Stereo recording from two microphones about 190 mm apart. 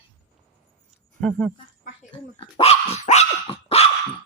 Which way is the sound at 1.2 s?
5° left (ahead or behind).